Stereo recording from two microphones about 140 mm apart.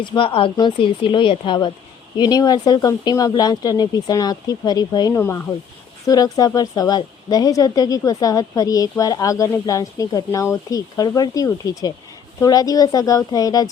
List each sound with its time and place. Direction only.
0.0 s a woman's voice: 35° left (ahead or behind)
5.1 s a woman's voice: 15° left (ahead or behind)